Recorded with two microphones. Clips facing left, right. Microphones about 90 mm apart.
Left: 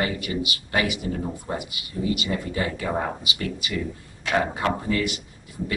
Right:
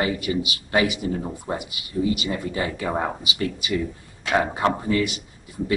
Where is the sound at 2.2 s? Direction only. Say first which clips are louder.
Right 1 dB; 20° right (ahead or behind).